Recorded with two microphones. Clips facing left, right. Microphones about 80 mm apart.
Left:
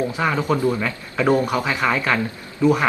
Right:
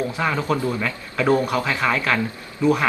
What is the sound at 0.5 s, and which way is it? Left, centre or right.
Speech, centre.